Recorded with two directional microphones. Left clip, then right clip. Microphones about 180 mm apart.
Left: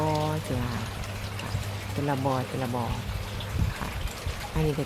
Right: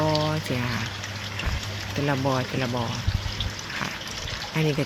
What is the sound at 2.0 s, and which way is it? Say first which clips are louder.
Speech: right 3 dB; 15° right (ahead or behind).